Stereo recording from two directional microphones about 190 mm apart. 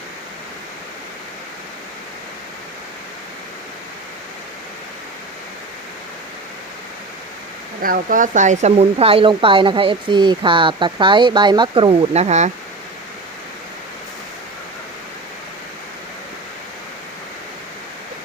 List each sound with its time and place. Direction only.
7.8 s speech: 45° right (ahead or behind)